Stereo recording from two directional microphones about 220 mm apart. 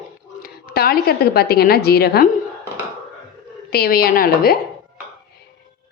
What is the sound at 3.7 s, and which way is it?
Speech, 45° left (ahead or behind).